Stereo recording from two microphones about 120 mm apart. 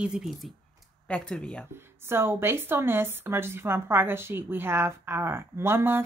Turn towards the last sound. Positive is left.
turn(degrees=-20)  # may be behind; listen again after turning